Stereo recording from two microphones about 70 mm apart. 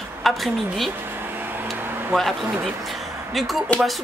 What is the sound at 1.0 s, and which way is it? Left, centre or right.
Vehicle, right.